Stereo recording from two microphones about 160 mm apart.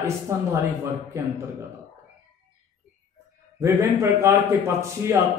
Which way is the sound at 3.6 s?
20° right (ahead or behind).